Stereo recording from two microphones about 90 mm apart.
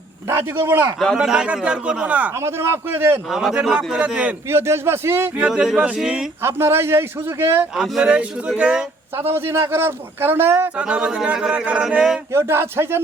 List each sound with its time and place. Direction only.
0.3 s a man's voice: 30° right (ahead or behind)
0.9 s speech: centre (ahead or behind)
2.3 s a man's voice: 30° right (ahead or behind)
3.2 s a man's voice: 5° right (ahead or behind)
4.4 s a man's voice: 30° right (ahead or behind)
5.5 s speech: 10° right (ahead or behind)
6.4 s a man's voice: 30° right (ahead or behind)
7.8 s speech: 10° right (ahead or behind)
9.1 s a man's voice: 25° right (ahead or behind)
10.8 s speech: 10° right (ahead or behind)
12.3 s a man's voice: 30° right (ahead or behind)